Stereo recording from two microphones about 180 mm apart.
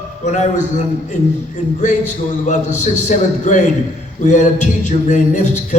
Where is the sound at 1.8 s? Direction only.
40° left (ahead or behind).